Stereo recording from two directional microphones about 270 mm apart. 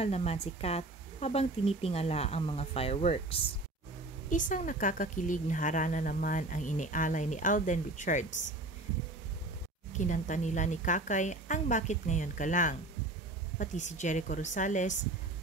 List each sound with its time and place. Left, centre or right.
0.0 s speech: left
9.9 s speech: left